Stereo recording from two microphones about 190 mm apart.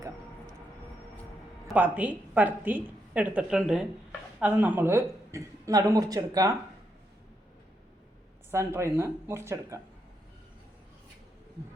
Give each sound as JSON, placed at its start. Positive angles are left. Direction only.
{"t": 1.6, "sound": "a woman's voice", "side_deg": -5}
{"t": 8.4, "sound": "a woman's voice", "side_deg": -15}